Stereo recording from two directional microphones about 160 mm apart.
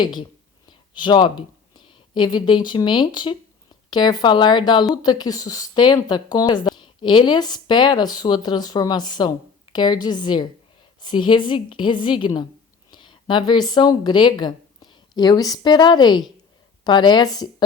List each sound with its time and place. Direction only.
0.0 s speech: 25° left (ahead or behind)